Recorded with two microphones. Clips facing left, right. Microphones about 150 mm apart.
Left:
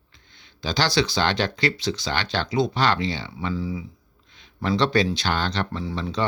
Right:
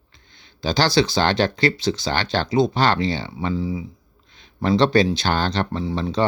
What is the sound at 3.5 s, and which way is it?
Speech, 25° right (ahead or behind).